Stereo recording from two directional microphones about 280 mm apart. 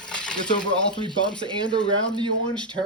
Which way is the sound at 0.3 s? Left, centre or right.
Centre.